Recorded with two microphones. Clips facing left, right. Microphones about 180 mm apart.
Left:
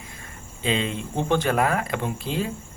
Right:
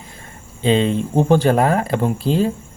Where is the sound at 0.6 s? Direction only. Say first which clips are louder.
Right 9 dB; 35° right (ahead or behind).